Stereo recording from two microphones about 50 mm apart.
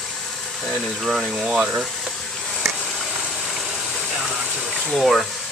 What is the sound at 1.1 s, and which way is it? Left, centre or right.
Speech, centre.